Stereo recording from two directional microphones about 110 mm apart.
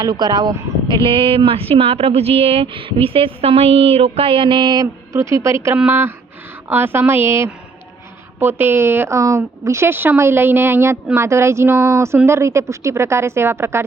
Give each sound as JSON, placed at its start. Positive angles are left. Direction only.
{"t": 0.0, "sound": "speech", "side_deg": -40}
{"t": 1.0, "sound": "speech", "side_deg": -55}
{"t": 5.1, "sound": "a woman's voice", "side_deg": -25}